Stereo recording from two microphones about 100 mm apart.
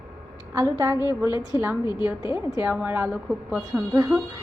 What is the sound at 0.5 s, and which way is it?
Speech, 30° right (ahead or behind).